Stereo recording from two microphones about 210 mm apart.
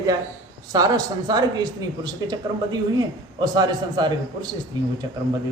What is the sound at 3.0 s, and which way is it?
A woman's voice, 20° right (ahead or behind).